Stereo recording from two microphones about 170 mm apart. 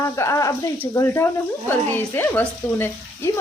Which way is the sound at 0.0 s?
20° left (ahead or behind).